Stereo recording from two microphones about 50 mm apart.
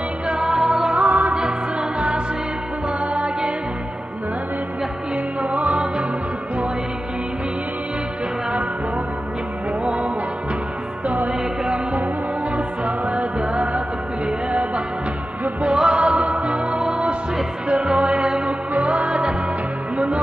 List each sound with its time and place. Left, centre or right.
0.3 s music: centre
0.9 s music: right
1.3 s music: centre
5.4 s music: right
11.6 s music: right
15.6 s music: centre
17.8 s music: centre